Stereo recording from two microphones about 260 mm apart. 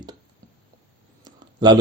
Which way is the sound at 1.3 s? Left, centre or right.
Centre.